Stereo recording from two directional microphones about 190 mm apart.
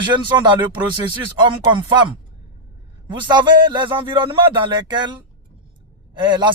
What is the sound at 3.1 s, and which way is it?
A man's voice, 25° right (ahead or behind).